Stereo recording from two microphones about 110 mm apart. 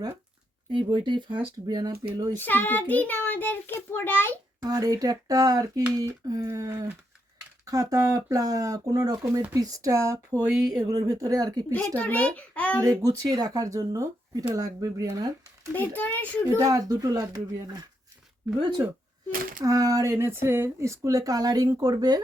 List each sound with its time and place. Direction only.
0.7 s speech: 45° right (ahead or behind)
2.3 s a child's voice: 15° left (ahead or behind)
4.6 s speech: 35° right (ahead or behind)
6.0 s a sound: 30° right (ahead or behind)
7.6 s speech: 30° right (ahead or behind)
9.5 s a sound: 35° right (ahead or behind)
10.7 s speech: 35° right (ahead or behind)
11.7 s a child's voice: 15° left (ahead or behind)
12.8 s speech: 30° right (ahead or behind)
15.7 s a child's voice: 15° left (ahead or behind)
16.6 s speech: 30° right (ahead or behind)
19.6 s speech: 30° right (ahead or behind)